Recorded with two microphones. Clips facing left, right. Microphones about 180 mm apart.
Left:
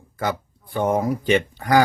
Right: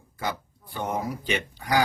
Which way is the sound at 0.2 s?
50° left (ahead or behind).